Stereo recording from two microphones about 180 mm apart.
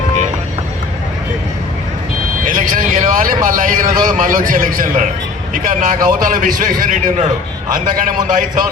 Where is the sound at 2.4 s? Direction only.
50° right (ahead or behind).